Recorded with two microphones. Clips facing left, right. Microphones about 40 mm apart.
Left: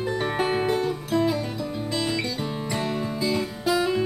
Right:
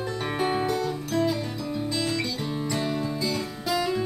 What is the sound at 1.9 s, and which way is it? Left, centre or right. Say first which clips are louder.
Music: left 4 dB; left.